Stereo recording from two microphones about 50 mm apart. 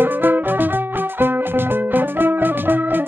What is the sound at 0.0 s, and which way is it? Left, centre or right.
Music, right.